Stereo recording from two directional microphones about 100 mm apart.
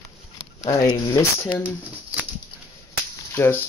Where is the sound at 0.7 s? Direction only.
35° left (ahead or behind).